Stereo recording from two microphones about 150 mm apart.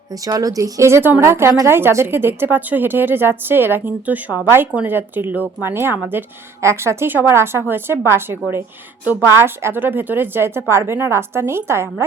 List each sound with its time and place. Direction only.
0.1 s speech: 25° right (ahead or behind)